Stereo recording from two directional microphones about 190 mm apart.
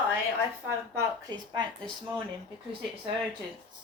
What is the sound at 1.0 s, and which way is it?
Speech, 20° right (ahead or behind).